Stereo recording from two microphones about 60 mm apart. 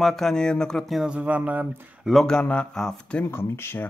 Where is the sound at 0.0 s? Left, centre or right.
Centre.